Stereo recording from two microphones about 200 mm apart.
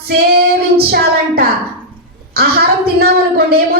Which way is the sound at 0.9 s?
50° right (ahead or behind).